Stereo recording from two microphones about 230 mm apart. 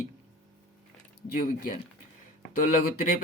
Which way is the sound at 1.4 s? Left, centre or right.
Left.